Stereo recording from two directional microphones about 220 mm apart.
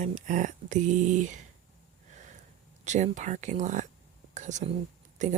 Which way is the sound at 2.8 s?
35° right (ahead or behind).